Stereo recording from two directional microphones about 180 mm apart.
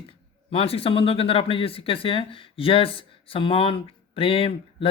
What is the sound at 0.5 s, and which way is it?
Speech, 35° left (ahead or behind).